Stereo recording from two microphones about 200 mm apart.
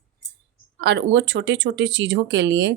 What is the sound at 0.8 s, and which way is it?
Speech, 60° right (ahead or behind).